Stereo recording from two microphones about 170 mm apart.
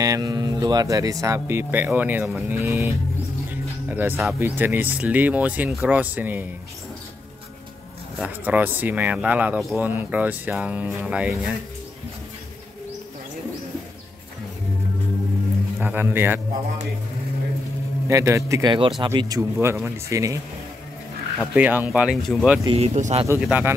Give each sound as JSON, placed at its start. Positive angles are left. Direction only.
{"t": 0.0, "sound": "speech", "side_deg": -20}
{"t": 3.9, "sound": "speech", "side_deg": -10}
{"t": 8.2, "sound": "speech", "side_deg": -10}
{"t": 15.8, "sound": "speech", "side_deg": -10}
{"t": 18.0, "sound": "speech", "side_deg": -15}
{"t": 21.4, "sound": "speech", "side_deg": -10}
{"t": 22.7, "sound": "speech", "side_deg": -40}
{"t": 23.4, "sound": "speech", "side_deg": -10}